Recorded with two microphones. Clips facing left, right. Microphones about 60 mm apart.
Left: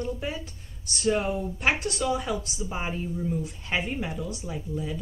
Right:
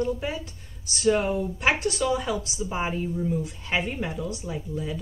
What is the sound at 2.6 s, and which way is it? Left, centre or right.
Speech, centre.